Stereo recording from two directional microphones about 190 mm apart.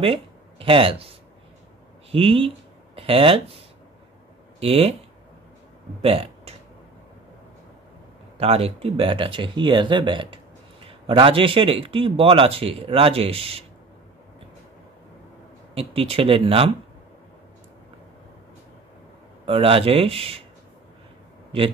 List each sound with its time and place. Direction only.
0.0 s a man's voice: 30° right (ahead or behind)
4.6 s speech: 30° right (ahead or behind)
6.0 s speech: 30° right (ahead or behind)
8.4 s a man's voice: 30° right (ahead or behind)
15.7 s speech: 30° right (ahead or behind)
19.4 s speech: 30° right (ahead or behind)
21.5 s speech: 30° right (ahead or behind)